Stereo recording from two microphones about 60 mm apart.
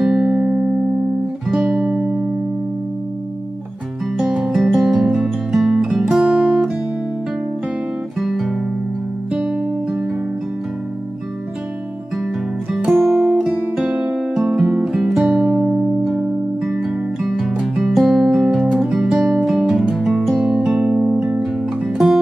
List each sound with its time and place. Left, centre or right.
0.0 s music: centre
4.2 s music: centre
6.2 s music: centre
8.2 s guitar: centre
9.3 s music: centre
12.9 s music: centre